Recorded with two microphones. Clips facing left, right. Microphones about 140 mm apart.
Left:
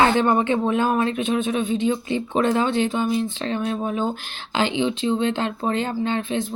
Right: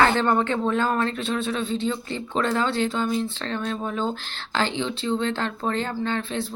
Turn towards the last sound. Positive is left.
turn(degrees=20)  # may be behind; listen again after turning